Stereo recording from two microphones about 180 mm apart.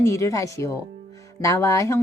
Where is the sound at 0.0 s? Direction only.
15° left (ahead or behind).